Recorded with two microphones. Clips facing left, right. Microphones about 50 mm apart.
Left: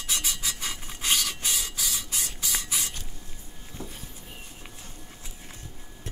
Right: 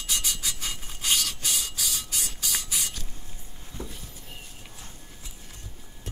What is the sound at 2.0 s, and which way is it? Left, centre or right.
Spray, left.